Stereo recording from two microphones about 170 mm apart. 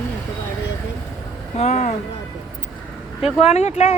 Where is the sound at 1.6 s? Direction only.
45° left (ahead or behind).